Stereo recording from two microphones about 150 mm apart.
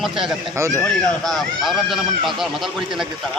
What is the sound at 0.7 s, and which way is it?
Speech, 5° left (ahead or behind).